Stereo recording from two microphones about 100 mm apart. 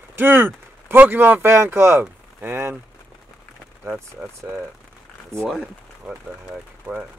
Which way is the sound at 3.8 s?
15° right (ahead or behind).